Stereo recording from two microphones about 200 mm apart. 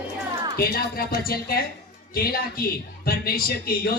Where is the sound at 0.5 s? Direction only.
50° left (ahead or behind).